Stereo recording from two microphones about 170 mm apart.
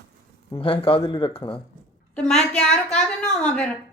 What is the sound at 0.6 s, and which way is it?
Speech, 30° left (ahead or behind).